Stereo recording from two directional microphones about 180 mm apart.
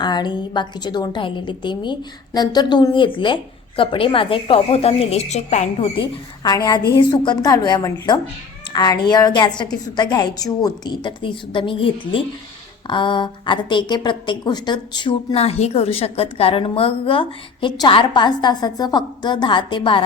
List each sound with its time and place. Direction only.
0.0 s a woman's voice: 25° left (ahead or behind); by 5.9 s 40° left (ahead or behind)
6.0 s a woman's voice: 20° left (ahead or behind)